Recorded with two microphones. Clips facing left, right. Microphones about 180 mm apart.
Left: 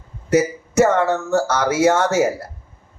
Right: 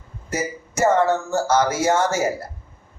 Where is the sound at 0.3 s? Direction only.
65° left (ahead or behind).